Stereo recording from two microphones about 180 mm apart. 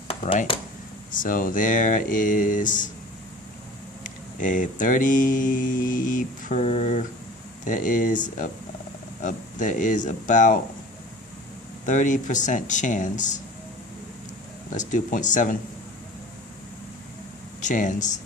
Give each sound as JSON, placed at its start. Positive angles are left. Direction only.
{"t": 1.1, "sound": "mantra", "side_deg": 50}
{"t": 4.0, "sound": "mantra", "side_deg": 45}
{"t": 11.9, "sound": "mantra", "side_deg": 45}
{"t": 14.7, "sound": "mantra", "side_deg": 45}
{"t": 17.6, "sound": "speech", "side_deg": 45}